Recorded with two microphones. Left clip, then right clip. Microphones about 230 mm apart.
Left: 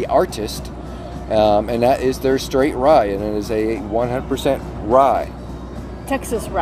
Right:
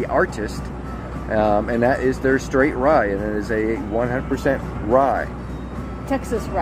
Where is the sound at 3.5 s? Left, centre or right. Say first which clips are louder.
Left 2 dB; left.